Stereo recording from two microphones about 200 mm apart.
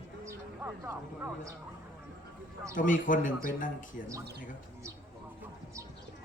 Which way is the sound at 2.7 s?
40° left (ahead or behind).